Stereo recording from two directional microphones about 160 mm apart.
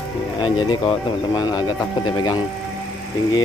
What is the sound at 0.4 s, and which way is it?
Speech, 30° left (ahead or behind).